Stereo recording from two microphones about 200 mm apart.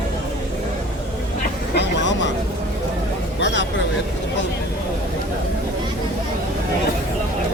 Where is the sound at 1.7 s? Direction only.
60° left (ahead or behind).